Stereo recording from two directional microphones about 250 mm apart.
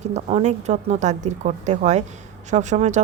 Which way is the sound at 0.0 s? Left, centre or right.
Right.